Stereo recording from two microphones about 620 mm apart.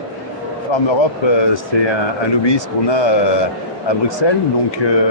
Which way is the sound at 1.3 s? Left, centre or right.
Left.